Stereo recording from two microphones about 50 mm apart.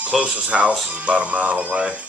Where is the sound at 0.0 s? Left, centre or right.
Right.